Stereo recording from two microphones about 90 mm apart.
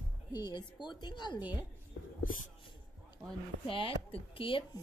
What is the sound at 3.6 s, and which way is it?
Speech, 80° left.